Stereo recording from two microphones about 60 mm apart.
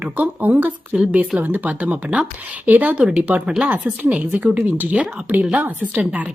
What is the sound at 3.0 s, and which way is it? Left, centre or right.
Speech, centre.